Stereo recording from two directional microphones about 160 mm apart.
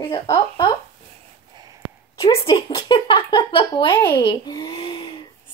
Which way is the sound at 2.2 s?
35° left (ahead or behind).